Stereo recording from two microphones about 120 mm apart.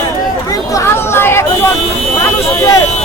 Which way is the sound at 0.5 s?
25° left (ahead or behind).